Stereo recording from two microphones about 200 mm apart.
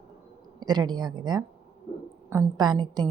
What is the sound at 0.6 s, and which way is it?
A woman's voice, 20° right (ahead or behind).